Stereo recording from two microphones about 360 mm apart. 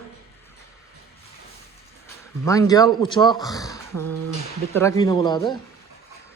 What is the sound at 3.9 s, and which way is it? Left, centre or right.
Speech, right.